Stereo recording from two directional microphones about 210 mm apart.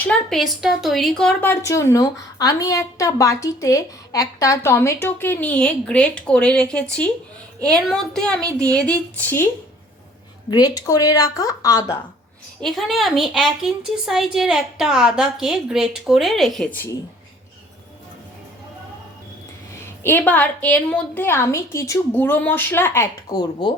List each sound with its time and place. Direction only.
0.1 s a woman's voice: centre (ahead or behind)
10.5 s a woman's voice: 15° left (ahead or behind)
12.6 s a woman's voice: centre (ahead or behind)
20.0 s a woman's voice: 10° left (ahead or behind)